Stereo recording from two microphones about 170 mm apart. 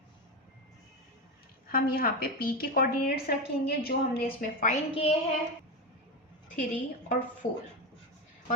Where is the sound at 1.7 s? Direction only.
60° left (ahead or behind).